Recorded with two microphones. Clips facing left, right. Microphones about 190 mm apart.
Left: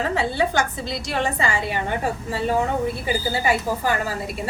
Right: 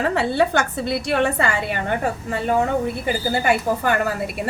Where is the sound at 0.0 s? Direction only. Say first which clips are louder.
Right 3 dB; 60° right (ahead or behind).